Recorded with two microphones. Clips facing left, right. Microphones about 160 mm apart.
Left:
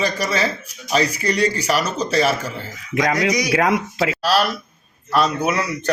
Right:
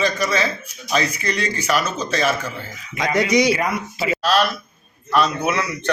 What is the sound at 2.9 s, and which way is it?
Speech, 85° left.